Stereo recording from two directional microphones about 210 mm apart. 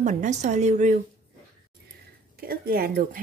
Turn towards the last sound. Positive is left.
turn(degrees=-40)  # may be behind; listen again after turning